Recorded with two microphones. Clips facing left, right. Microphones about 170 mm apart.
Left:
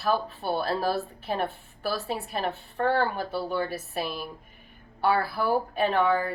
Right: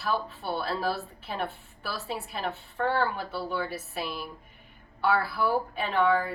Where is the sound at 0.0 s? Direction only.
40° left (ahead or behind).